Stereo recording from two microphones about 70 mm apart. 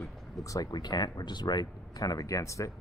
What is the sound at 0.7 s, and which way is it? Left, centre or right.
Speech, left.